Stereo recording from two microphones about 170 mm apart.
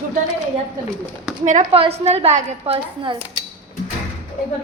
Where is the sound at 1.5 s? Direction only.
45° right (ahead or behind).